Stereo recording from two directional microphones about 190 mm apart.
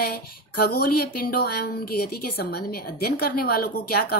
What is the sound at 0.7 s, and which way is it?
A woman's voice, 50° left (ahead or behind).